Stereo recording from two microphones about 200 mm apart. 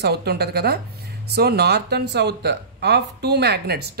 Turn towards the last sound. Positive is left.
turn(degrees=-55)  # may be behind; listen again after turning